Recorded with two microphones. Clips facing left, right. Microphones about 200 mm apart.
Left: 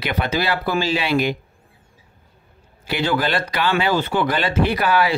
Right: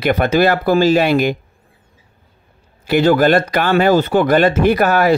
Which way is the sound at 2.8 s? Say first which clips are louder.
Right 9 dB; 45° right (ahead or behind).